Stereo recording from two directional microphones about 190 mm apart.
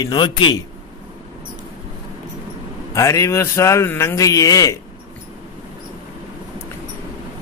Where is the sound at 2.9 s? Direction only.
15° left (ahead or behind).